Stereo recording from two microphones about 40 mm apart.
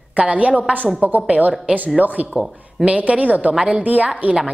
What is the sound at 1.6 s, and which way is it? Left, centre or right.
A woman's voice, right.